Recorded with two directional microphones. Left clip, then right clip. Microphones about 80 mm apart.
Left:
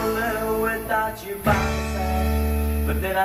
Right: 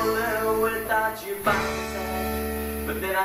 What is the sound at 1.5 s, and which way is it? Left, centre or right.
Music, left.